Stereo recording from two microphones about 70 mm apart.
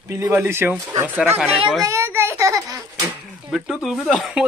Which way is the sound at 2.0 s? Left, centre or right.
Right.